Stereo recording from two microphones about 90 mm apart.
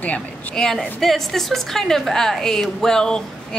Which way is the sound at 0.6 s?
Centre (ahead or behind).